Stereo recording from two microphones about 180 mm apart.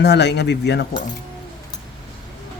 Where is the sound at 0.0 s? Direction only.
70° left (ahead or behind).